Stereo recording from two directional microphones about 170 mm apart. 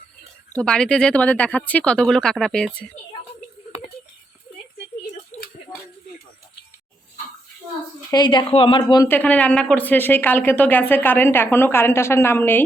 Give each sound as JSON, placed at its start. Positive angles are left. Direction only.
{"t": 0.5, "sound": "speech", "side_deg": 5}
{"t": 8.1, "sound": "speech", "side_deg": 25}
{"t": 9.0, "sound": "speech", "side_deg": 10}